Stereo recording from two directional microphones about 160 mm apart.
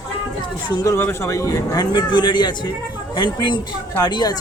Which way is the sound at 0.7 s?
20° left (ahead or behind).